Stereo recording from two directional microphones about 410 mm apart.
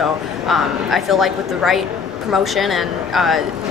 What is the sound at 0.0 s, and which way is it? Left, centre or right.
Speech, centre.